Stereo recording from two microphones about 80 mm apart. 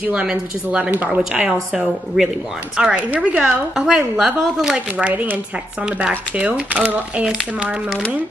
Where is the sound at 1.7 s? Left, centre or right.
Centre.